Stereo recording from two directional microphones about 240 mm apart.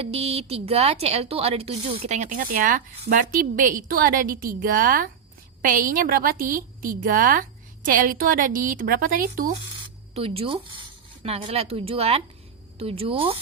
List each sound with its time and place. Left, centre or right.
0.0 s a woman's voice: right
10.2 s a woman's voice: right